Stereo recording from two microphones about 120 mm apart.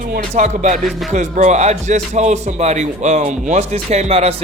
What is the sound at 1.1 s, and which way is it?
A man's voice, 85° right.